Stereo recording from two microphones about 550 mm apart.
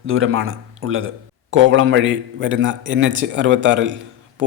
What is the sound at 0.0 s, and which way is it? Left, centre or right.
Speech, right.